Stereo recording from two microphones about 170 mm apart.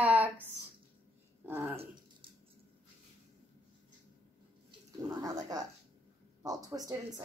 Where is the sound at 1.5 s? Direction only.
10° right (ahead or behind).